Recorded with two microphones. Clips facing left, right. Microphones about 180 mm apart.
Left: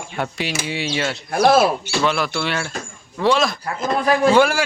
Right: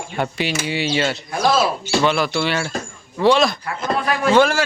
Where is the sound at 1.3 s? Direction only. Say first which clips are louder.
Left 5 dB; 60° left (ahead or behind).